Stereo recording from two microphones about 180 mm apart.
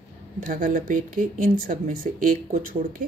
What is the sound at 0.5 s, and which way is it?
Speech, 50° right (ahead or behind).